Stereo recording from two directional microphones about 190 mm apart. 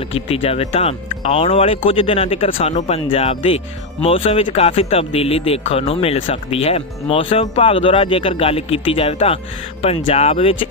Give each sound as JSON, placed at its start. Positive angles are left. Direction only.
{"t": 0.1, "sound": "speech", "side_deg": 30}